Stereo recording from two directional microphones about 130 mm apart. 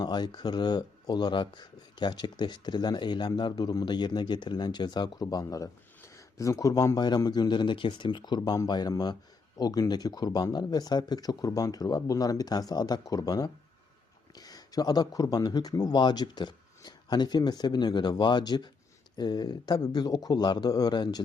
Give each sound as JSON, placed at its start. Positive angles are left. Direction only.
{"t": 0.0, "sound": "speech", "side_deg": 35}